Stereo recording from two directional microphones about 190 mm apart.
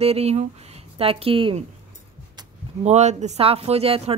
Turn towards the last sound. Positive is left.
turn(degrees=-30)  # may be behind; listen again after turning